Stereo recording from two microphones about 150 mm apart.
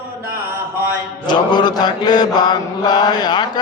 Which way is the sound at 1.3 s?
30° left (ahead or behind).